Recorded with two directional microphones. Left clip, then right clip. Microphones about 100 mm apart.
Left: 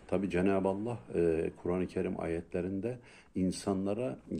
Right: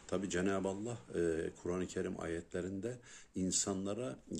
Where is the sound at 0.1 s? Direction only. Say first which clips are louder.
Left 6 dB; 25° right (ahead or behind).